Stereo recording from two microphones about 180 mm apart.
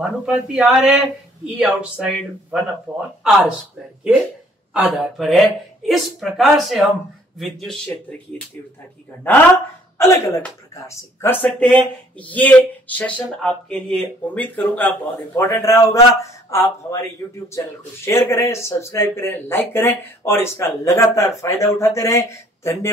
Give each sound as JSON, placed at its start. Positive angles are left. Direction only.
{"t": 0.0, "sound": "a man's voice", "side_deg": -5}
{"t": 4.7, "sound": "a man's voice", "side_deg": -5}
{"t": 9.9, "sound": "speech", "side_deg": 15}